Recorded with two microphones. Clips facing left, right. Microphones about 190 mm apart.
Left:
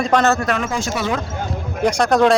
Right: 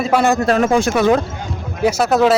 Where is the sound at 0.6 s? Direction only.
60° right (ahead or behind).